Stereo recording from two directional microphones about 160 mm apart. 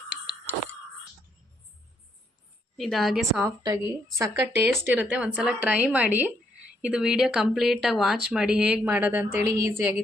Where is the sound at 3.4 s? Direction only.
25° right (ahead or behind).